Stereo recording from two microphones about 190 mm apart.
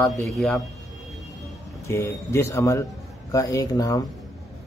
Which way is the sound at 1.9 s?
15° left (ahead or behind).